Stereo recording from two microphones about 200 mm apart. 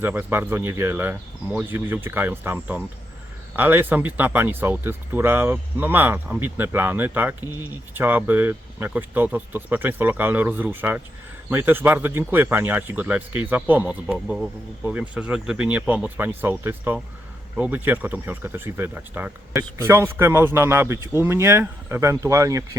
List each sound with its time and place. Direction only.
0.0 s speech: 10° right (ahead or behind)
7.4 s speech: 20° left (ahead or behind)
7.9 s speech: 10° right (ahead or behind)